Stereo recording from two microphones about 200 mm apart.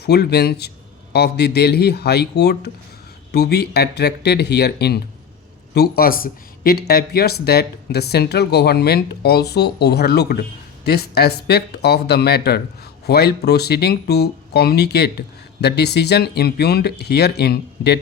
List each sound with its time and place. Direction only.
0.0 s speech: 55° left (ahead or behind)